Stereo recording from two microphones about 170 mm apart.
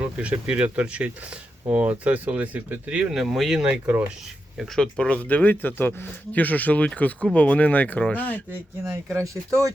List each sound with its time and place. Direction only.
0.0 s speech: 5° right (ahead or behind)
4.5 s speech: 5° left (ahead or behind)
8.9 s speech: 15° right (ahead or behind)